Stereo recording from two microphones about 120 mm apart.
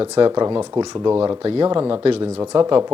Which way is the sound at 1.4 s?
50° right (ahead or behind).